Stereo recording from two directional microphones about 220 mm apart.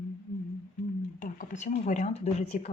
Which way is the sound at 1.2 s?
35° left (ahead or behind).